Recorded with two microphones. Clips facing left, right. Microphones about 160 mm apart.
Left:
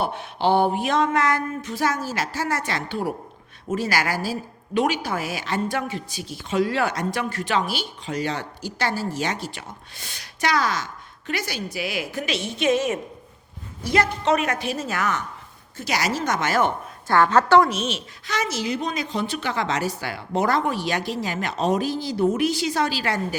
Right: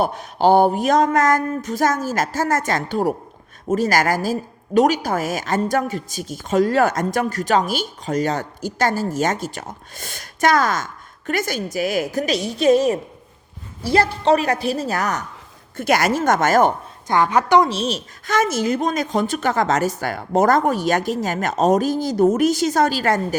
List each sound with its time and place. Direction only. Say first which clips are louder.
0.0 s a woman's voice: right 5 dB; 40° right (ahead or behind)
15.8 s a woman's voice: right 7 dB; 50° right (ahead or behind)
17.1 s a woman's voice: even; 15° right (ahead or behind)
17.7 s a woman's voice: right 4 dB; 35° right (ahead or behind)